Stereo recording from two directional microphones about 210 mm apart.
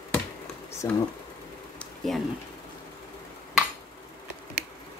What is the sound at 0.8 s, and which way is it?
Speech, 15° left (ahead or behind).